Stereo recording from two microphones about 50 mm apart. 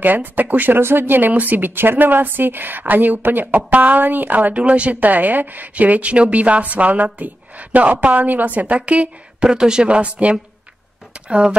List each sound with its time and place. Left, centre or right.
0.0 s speech: right
9.5 s speech: centre
11.1 s a sound: right